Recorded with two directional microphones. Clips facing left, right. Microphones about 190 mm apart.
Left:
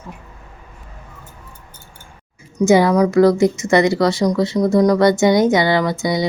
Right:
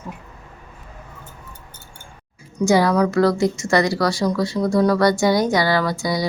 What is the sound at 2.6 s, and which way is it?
A woman's voice, 20° left (ahead or behind).